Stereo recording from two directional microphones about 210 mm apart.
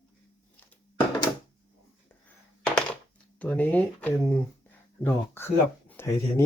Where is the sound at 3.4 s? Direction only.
5° left (ahead or behind).